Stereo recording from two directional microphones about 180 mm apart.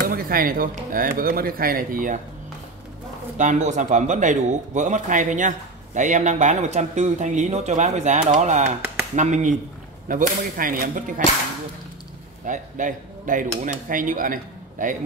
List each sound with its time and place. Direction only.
0.1 s speech: 55° right (ahead or behind)
3.3 s speech: 45° right (ahead or behind)
12.4 s speech: 45° right (ahead or behind)